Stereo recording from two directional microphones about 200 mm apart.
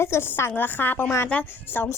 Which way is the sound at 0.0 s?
10° left (ahead or behind).